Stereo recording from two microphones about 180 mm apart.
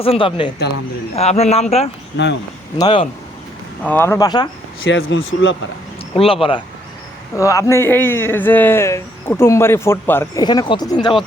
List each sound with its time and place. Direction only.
0.0 s a man's voice: 30° left (ahead or behind)
2.2 s speech: 80° left
2.7 s speech: 25° left (ahead or behind)
3.8 s a man's voice: 10° left (ahead or behind)
4.8 s speech: 90° left
6.1 s a man's voice: 30° left (ahead or behind)
7.3 s a man's voice: 15° left (ahead or behind)
10.4 s speech: 25° left (ahead or behind)